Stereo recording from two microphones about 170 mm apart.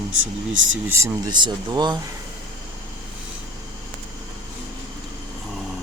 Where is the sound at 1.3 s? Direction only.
25° right (ahead or behind).